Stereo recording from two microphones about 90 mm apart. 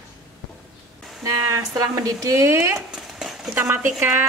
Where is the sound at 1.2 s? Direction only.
40° right (ahead or behind).